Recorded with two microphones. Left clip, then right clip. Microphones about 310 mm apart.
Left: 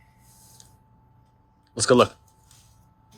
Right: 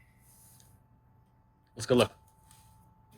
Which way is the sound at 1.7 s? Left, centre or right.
Centre.